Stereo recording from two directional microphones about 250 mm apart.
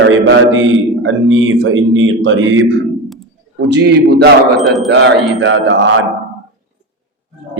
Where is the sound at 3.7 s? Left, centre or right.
Right.